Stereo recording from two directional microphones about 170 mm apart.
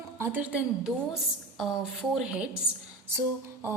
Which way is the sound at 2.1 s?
5° right (ahead or behind).